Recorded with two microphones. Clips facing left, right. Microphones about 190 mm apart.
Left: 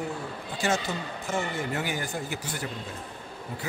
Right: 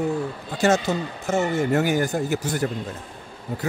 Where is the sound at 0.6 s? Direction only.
45° right (ahead or behind).